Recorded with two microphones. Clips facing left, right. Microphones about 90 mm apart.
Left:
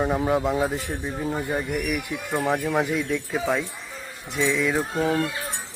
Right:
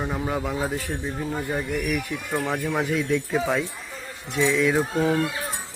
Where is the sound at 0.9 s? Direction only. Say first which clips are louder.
Left 1 dB; 5° left (ahead or behind).